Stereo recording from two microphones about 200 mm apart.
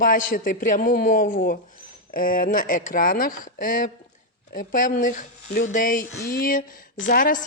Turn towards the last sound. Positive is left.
turn(degrees=45)  # may be behind; listen again after turning